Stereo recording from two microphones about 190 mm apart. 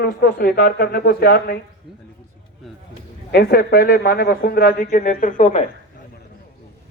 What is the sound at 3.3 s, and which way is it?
A man's voice, 55° left (ahead or behind).